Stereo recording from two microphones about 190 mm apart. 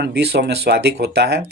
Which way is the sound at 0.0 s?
60° right (ahead or behind).